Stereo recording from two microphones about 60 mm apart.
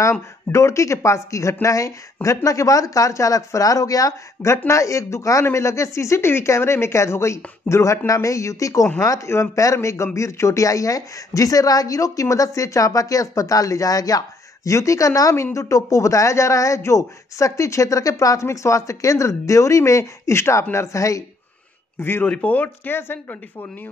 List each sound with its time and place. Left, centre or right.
0.0 s speech: left
9.3 s speech: left
22.2 s speech: left